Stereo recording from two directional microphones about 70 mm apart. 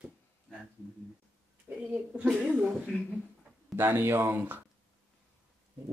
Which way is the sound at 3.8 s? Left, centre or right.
Right.